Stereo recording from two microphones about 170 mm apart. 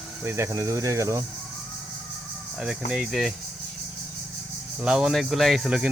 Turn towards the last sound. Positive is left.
turn(degrees=-5)  # may be behind; listen again after turning